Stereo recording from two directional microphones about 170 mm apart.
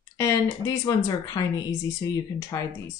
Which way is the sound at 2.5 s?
15° left (ahead or behind).